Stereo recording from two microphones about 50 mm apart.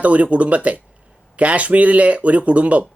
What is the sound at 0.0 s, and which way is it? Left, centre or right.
Speech, right.